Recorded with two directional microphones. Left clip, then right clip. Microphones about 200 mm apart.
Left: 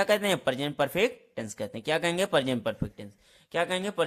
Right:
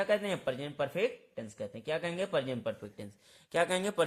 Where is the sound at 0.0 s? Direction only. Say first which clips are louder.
Left 6 dB; 30° left (ahead or behind).